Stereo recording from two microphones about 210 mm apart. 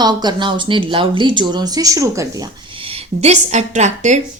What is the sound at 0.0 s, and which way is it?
A woman's voice, 20° right (ahead or behind).